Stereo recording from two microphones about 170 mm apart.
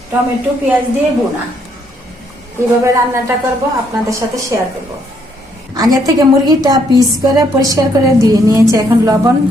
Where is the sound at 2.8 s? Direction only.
15° right (ahead or behind).